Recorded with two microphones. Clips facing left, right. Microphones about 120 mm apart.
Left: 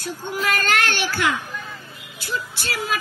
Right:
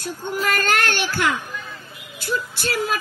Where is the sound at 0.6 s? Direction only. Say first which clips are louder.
Right 1 dB; 50° right (ahead or behind).